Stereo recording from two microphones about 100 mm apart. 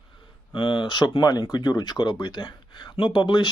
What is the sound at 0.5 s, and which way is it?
Speech, 55° left (ahead or behind).